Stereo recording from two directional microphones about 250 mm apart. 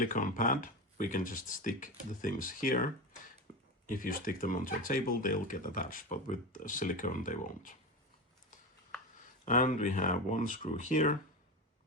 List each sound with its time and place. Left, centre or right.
0.0 s speech: left
9.1 s speech: left